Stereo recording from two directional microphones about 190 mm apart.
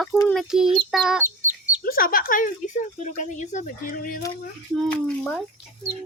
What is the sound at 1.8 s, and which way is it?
Speech, 50° left (ahead or behind).